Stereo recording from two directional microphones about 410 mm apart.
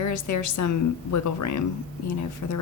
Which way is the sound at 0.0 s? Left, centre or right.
Left.